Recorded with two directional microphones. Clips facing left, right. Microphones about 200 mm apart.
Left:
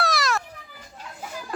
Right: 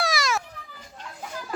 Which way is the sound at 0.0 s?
Centre (ahead or behind).